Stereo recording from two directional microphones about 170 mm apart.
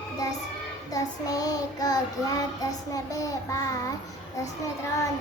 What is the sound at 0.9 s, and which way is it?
Child singing, 20° left (ahead or behind).